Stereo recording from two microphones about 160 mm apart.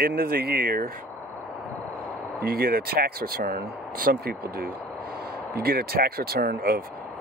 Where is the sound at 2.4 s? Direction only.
70° right (ahead or behind).